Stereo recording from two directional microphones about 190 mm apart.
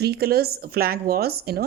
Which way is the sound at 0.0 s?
55° right (ahead or behind).